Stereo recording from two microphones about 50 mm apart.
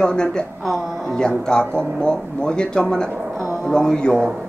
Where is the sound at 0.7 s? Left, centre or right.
Centre.